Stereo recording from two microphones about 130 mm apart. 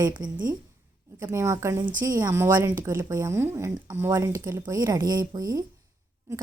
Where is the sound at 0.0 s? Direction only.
30° right (ahead or behind).